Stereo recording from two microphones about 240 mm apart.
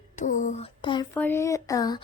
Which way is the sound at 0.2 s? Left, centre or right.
Left.